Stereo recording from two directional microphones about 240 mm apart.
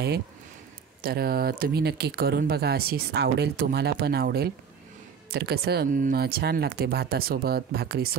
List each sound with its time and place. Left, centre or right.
1.0 s speech: right